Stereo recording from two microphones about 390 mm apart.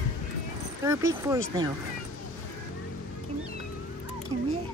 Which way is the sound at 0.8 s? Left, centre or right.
Centre.